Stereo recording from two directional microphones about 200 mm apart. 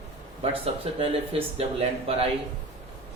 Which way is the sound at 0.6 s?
30° right (ahead or behind).